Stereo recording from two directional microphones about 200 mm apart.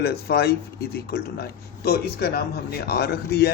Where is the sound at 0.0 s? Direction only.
50° left (ahead or behind).